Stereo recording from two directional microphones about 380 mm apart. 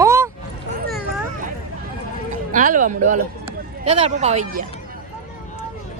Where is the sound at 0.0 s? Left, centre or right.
Centre.